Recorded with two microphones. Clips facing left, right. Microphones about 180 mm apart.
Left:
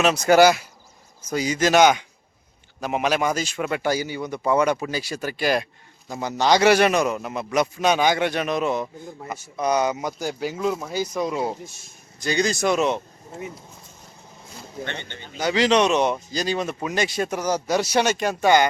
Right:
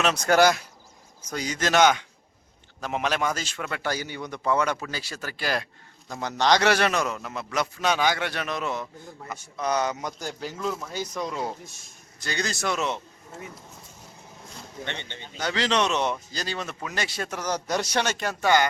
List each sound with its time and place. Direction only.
0.0 s a man's voice: 5° left (ahead or behind)
6.1 s a man's voice: 5° left (ahead or behind)
12.2 s a man's voice: 15° left (ahead or behind)
15.4 s a man's voice: 10° left (ahead or behind)